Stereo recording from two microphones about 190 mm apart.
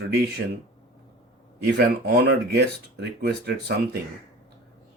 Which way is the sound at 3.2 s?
60° right (ahead or behind).